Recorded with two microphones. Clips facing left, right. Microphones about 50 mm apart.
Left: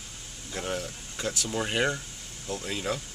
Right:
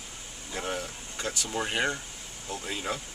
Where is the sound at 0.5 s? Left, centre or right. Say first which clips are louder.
Left 1 dB; centre.